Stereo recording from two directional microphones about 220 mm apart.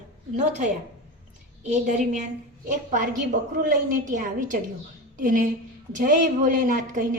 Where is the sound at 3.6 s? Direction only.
40° right (ahead or behind).